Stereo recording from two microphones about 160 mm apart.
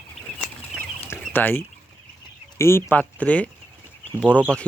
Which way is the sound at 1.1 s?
10° left (ahead or behind).